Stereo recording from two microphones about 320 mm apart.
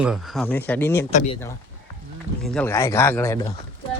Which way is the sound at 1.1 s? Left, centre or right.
Left.